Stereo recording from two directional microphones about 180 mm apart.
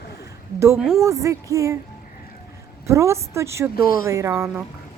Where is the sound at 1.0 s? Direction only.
15° right (ahead or behind).